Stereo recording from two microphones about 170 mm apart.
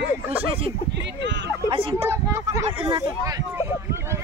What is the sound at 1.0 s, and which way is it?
Speech, 90° right.